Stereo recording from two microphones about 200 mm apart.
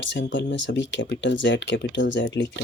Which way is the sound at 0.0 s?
65° left (ahead or behind).